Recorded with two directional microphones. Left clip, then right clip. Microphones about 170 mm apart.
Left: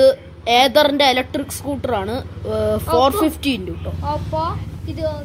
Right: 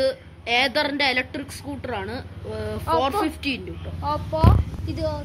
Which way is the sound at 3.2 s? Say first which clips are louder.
Left 6 dB; 25° left (ahead or behind).